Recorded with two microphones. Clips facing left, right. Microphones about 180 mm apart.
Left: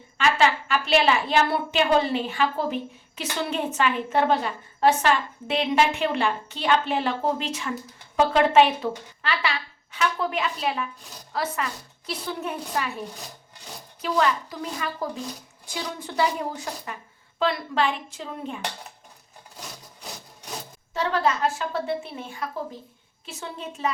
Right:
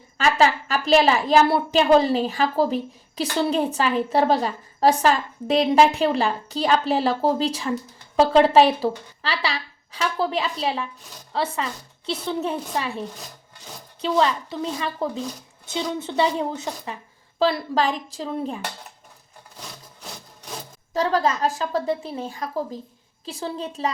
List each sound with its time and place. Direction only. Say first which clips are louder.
0.2 s a woman's voice: right 2 dB; 35° right (ahead or behind)
20.9 s a woman's voice: right 3 dB; 40° right (ahead or behind)